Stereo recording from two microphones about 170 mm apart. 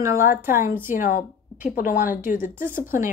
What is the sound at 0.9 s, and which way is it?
A woman's voice, 50° left (ahead or behind).